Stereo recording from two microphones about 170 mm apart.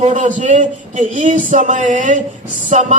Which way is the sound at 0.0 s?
45° right (ahead or behind).